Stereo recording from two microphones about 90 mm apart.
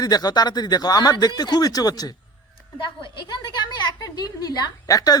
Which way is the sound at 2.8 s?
60° left (ahead or behind).